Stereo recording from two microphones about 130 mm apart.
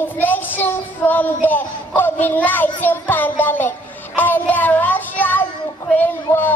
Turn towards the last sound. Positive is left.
turn(degrees=15)  # may be behind; listen again after turning